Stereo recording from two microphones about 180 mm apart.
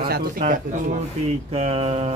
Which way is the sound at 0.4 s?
35° right (ahead or behind).